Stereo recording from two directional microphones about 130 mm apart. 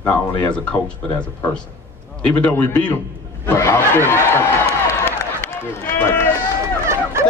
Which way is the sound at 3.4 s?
15° left (ahead or behind).